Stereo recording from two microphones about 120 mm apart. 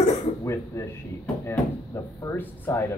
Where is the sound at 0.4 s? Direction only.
25° left (ahead or behind).